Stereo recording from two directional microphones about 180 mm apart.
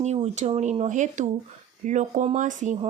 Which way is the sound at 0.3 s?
40° right (ahead or behind).